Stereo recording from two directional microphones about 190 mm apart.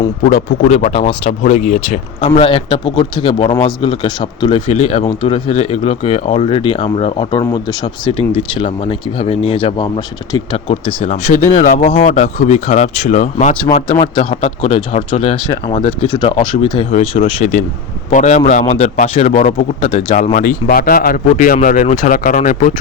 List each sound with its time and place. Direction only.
0.3 s speech: 40° left (ahead or behind)
10.7 s speech: 35° left (ahead or behind)
14.0 s speech: 30° left (ahead or behind)